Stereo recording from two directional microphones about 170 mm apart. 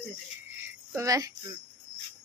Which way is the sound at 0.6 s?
15° right (ahead or behind).